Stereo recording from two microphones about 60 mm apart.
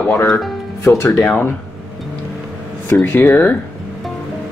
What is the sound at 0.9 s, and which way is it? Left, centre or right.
Speech, left.